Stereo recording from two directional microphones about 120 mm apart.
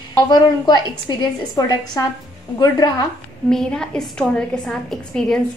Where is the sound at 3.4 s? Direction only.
5° left (ahead or behind).